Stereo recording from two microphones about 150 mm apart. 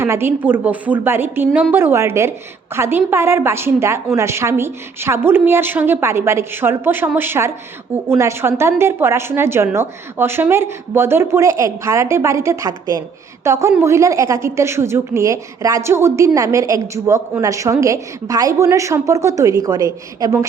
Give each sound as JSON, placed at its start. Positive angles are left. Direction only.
{"t": 0.0, "sound": "a woman's voice", "side_deg": -15}